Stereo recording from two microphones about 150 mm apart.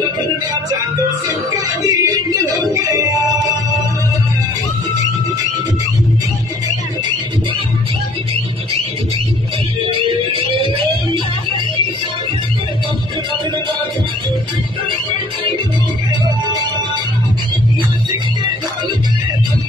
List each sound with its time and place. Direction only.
1.8 s music: 20° right (ahead or behind)
9.9 s music: 35° right (ahead or behind)